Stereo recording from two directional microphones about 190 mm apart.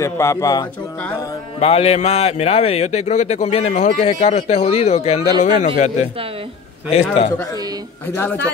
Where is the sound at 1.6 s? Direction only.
30° left (ahead or behind).